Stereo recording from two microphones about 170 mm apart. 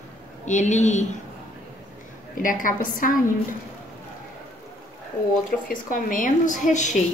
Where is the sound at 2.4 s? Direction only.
55° left (ahead or behind).